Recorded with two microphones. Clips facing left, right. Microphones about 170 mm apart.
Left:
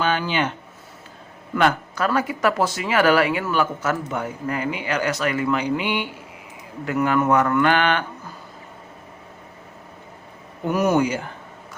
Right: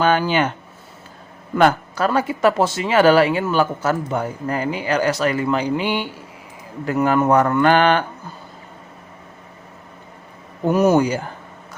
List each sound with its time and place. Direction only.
0.0 s speech: 45° right (ahead or behind)
1.5 s speech: 40° right (ahead or behind)
2.0 s speech: 25° right (ahead or behind)
10.7 s speech: 25° right (ahead or behind)